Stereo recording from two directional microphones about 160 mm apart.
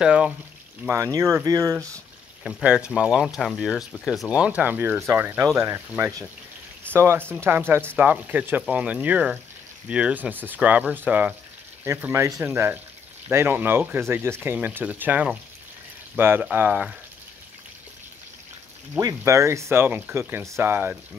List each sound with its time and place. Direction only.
0.0 s speech: 5° right (ahead or behind)
0.8 s speech: 20° right (ahead or behind)
2.4 s speech: 5° right (ahead or behind)
18.9 s speech: 20° right (ahead or behind)